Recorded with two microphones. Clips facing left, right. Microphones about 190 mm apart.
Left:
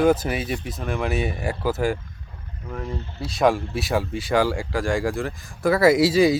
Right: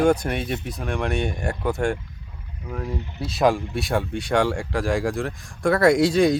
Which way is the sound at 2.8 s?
15° right (ahead or behind).